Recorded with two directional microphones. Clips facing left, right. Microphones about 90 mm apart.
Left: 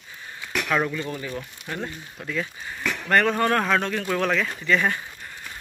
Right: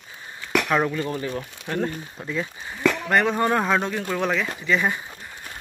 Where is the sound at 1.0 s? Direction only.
40° right (ahead or behind).